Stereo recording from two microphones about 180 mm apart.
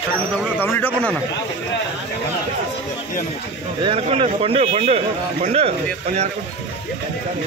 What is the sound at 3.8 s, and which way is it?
A man's voice, 30° right (ahead or behind).